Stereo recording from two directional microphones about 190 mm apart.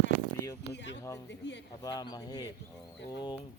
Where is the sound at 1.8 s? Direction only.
20° left (ahead or behind).